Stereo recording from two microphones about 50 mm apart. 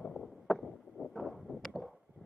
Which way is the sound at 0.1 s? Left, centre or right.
Centre.